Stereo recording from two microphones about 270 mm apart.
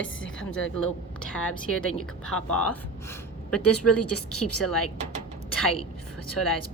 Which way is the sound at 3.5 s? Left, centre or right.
Left.